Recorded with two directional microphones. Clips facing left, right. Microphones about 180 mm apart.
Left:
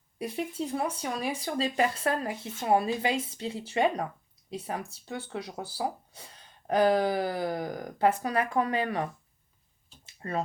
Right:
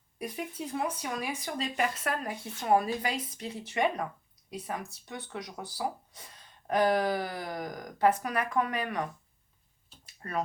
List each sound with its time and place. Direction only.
0.2 s speech: 30° left (ahead or behind)
10.2 s speech: 25° left (ahead or behind)